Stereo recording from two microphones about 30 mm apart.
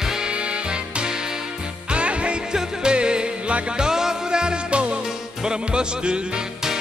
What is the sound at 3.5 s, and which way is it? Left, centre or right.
Music, right.